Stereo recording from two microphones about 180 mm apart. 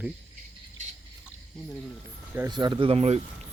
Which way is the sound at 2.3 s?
20° right (ahead or behind).